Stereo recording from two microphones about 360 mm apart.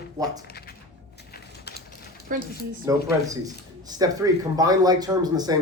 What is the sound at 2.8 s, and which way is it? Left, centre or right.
Speech, centre.